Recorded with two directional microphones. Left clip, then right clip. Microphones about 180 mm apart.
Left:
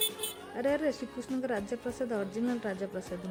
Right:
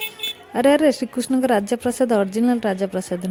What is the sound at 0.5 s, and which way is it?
A woman's voice, 55° right (ahead or behind).